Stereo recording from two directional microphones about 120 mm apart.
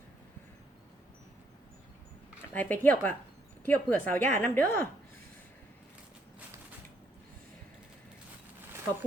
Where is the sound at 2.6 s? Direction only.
15° left (ahead or behind).